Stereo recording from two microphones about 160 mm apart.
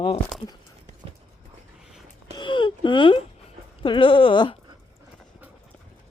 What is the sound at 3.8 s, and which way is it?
Speech, 30° left (ahead or behind).